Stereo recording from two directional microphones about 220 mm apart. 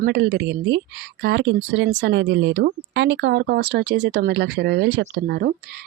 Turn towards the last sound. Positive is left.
turn(degrees=-45)  # may be behind; listen again after turning